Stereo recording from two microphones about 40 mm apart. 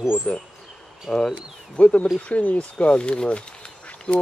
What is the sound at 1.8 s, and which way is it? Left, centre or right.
Speech, left.